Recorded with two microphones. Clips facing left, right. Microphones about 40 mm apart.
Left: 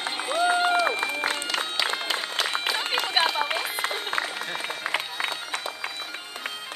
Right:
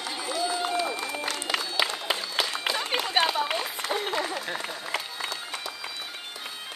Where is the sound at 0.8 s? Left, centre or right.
Left.